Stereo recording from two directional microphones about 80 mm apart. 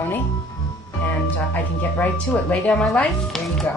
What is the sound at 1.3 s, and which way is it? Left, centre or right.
Speech, left.